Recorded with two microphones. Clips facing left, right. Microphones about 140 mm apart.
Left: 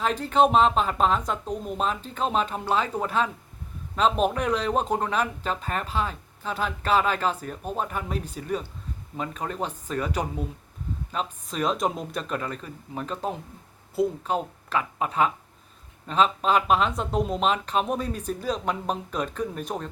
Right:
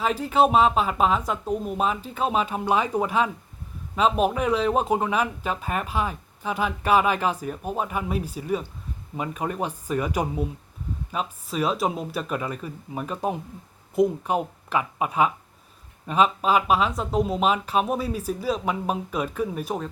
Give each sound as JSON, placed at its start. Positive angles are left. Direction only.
{"t": 0.0, "sound": "speech", "side_deg": -10}